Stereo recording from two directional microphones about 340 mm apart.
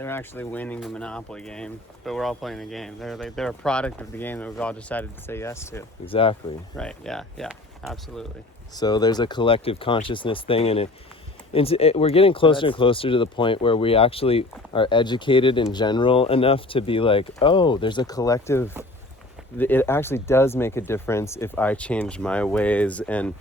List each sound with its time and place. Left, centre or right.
0.0 s speech: centre
6.7 s speech: centre
8.7 s speech: centre